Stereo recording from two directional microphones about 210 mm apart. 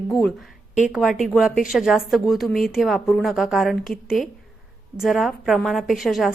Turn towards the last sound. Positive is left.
turn(degrees=0)  # may be behind; listen again after turning